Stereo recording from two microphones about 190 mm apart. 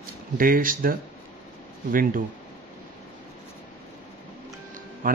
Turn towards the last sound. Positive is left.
turn(degrees=-45)  # may be behind; listen again after turning